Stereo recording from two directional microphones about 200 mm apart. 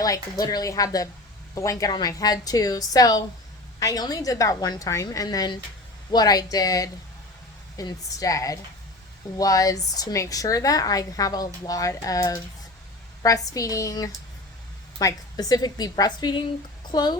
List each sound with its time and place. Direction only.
0.0 s a woman's voice: 20° left (ahead or behind)